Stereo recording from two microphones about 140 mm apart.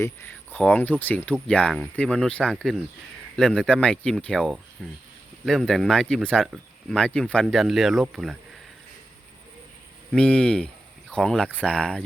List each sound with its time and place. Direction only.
0.5 s speech: 10° left (ahead or behind); by 8.4 s 5° right (ahead or behind)
10.1 s speech: 5° left (ahead or behind)